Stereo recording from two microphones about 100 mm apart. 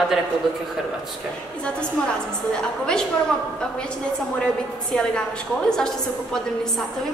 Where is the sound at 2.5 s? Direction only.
10° left (ahead or behind).